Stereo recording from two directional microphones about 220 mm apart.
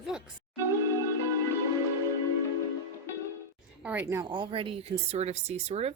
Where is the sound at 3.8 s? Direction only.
10° right (ahead or behind).